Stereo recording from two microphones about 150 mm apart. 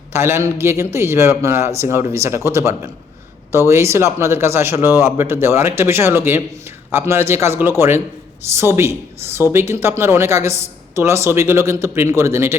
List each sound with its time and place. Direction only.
0.1 s speech: 15° right (ahead or behind)